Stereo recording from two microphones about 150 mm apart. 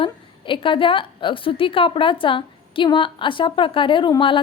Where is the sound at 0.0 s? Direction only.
35° left (ahead or behind).